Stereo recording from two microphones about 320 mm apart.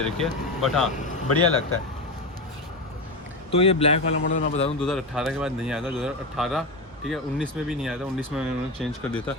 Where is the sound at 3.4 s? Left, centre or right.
Centre.